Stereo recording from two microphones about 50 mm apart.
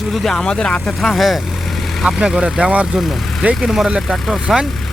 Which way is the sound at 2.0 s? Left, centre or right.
Centre.